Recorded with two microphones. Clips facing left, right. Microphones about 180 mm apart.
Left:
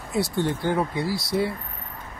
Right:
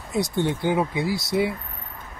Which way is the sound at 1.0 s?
20° right (ahead or behind).